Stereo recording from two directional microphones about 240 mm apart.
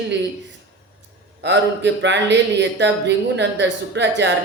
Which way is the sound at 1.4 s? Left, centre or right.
Right.